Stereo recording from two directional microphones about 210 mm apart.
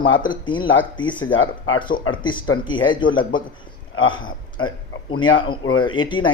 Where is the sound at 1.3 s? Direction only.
75° left (ahead or behind).